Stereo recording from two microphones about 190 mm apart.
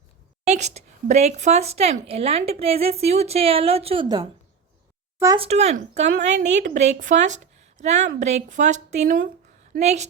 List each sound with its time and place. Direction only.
0.4 s speech: 35° right (ahead or behind)
5.4 s a woman's voice: 35° right (ahead or behind)
9.8 s speech: 35° right (ahead or behind)